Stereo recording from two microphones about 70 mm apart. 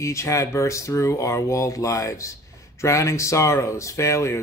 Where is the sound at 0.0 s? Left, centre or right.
Left.